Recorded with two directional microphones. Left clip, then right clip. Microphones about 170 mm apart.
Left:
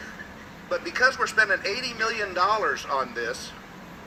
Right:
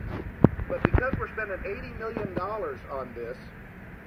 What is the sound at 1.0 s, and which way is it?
A man's voice, 35° left (ahead or behind).